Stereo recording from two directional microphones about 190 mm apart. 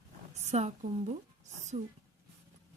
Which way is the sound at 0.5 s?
35° right (ahead or behind).